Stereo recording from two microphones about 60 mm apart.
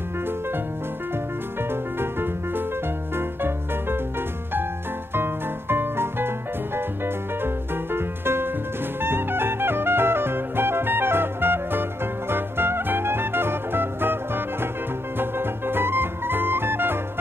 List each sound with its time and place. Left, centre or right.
1.7 s music: right
5.1 s music: right
7.4 s music: right